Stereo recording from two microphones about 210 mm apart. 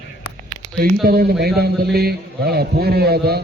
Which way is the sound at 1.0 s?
45° right (ahead or behind).